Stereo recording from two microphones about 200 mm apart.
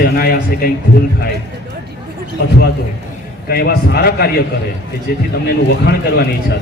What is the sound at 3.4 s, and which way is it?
A man's voice, 50° left (ahead or behind).